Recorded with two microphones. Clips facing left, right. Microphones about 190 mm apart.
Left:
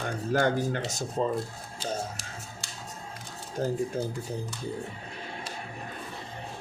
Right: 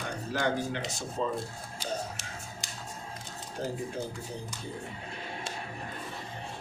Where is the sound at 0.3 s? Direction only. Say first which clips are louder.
Left 4 dB; 45° left (ahead or behind).